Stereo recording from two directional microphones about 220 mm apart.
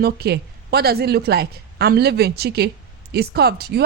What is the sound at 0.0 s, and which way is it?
A woman's voice, 45° right (ahead or behind).